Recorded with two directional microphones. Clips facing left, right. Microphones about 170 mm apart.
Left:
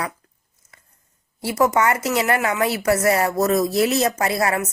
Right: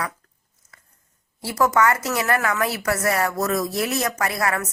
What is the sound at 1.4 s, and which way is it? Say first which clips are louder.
Speech: left 1 dB; 20° left (ahead or behind).